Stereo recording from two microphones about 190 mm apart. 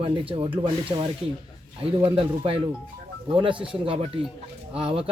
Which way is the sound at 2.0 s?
25° right (ahead or behind).